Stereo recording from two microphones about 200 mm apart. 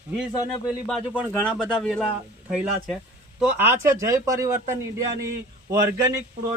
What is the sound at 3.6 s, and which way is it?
A man's voice, 15° right (ahead or behind).